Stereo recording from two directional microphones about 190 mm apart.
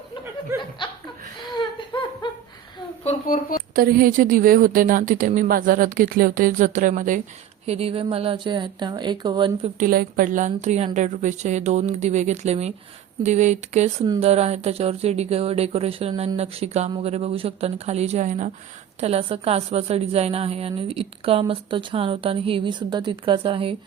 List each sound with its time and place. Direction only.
0.5 s speech: 15° right (ahead or behind)
3.1 s a sound: 35° left (ahead or behind)
3.8 s a woman's voice: 50° right (ahead or behind)
7.7 s a woman's voice: 30° right (ahead or behind)
9.7 s a woman's voice: 50° right (ahead or behind); by 23.7 s 25° right (ahead or behind)